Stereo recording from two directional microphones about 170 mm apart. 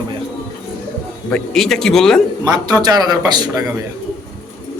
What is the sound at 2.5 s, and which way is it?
Speech, 25° right (ahead or behind).